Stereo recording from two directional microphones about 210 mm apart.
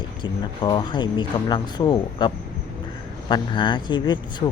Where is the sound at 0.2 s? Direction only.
20° left (ahead or behind).